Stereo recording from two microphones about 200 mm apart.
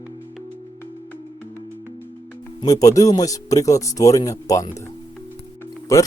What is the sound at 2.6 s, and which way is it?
Speech, 15° left (ahead or behind).